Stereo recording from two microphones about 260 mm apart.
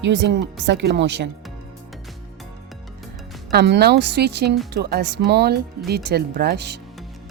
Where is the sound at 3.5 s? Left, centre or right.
Right.